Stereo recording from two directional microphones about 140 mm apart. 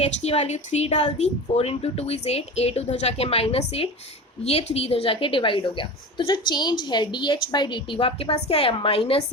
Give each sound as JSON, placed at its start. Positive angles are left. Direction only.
{"t": 0.0, "sound": "a woman's voice", "side_deg": 50}